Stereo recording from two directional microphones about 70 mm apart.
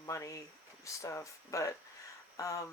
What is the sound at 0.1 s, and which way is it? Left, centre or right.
Speech, left.